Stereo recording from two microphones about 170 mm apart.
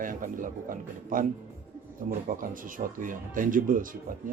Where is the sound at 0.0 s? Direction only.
50° right (ahead or behind).